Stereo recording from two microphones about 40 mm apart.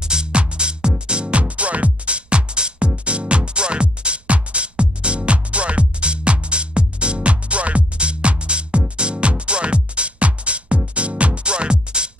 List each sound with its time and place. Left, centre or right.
0.0 s music: centre